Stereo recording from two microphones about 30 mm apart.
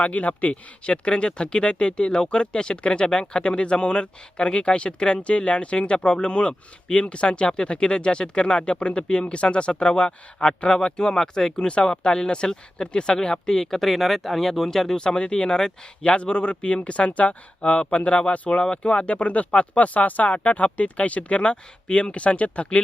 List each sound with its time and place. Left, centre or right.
0.0 s speech: left
0.9 s speech: left
10.4 s speech: left
13.7 s speech: centre
14.9 s speech: left
16.1 s speech: left
20.2 s speech: left
22.1 s speech: left